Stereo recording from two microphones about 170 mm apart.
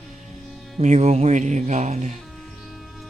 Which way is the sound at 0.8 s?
40° right (ahead or behind).